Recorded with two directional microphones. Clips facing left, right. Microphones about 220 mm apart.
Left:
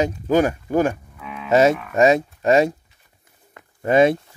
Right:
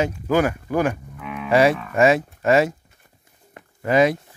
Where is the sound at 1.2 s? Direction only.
5° right (ahead or behind).